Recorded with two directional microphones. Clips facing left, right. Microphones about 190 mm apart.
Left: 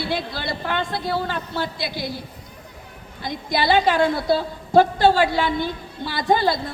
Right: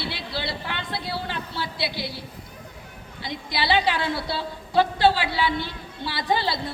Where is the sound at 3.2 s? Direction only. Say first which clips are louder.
Left 5 dB; 45° left (ahead or behind).